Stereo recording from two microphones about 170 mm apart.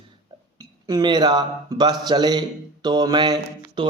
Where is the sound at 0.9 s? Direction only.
25° right (ahead or behind).